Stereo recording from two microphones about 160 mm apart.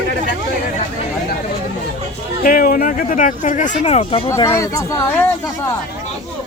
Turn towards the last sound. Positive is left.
turn(degrees=15)  # may be behind; listen again after turning